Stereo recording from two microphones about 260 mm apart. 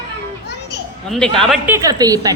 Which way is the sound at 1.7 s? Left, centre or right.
Centre.